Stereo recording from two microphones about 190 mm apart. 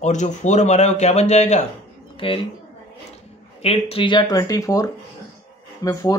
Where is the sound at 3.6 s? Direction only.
30° left (ahead or behind).